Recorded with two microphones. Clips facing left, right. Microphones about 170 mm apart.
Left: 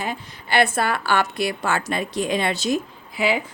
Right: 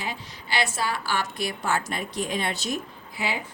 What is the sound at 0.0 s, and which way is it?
A woman's voice, 55° left (ahead or behind).